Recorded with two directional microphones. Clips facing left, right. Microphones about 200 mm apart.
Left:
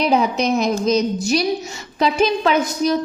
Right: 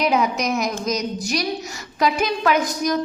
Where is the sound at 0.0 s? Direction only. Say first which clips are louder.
Left 3 dB; 30° left (ahead or behind).